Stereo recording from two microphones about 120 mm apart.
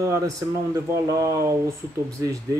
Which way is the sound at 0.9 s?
25° right (ahead or behind).